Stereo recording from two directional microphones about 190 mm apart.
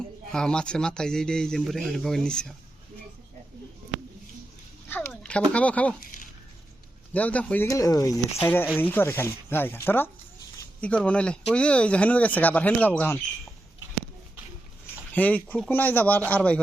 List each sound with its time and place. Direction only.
0.3 s speech: 5° left (ahead or behind)
4.9 s speech: 10° left (ahead or behind)
6.0 s a sound: 45° left (ahead or behind)
7.1 s speech: 10° left (ahead or behind)
15.1 s speech: 10° left (ahead or behind)